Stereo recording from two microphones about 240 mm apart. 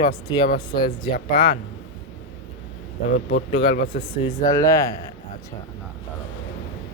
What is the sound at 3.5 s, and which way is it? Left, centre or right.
Speech, left.